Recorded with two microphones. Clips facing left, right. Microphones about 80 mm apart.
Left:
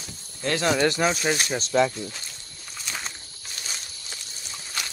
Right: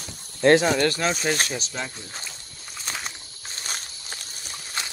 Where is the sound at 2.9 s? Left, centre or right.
Right.